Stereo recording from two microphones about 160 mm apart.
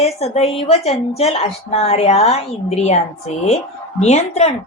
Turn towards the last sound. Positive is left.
turn(degrees=45)  # may be behind; listen again after turning